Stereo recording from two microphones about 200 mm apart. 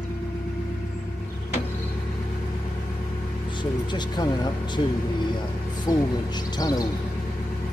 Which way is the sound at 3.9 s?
20° left (ahead or behind).